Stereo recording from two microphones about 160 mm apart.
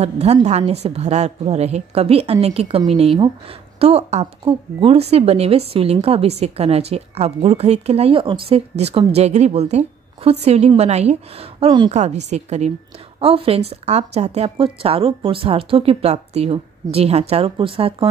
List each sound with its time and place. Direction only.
0.0 s a woman's voice: 40° right (ahead or behind)
11.9 s a woman's voice: 45° right (ahead or behind)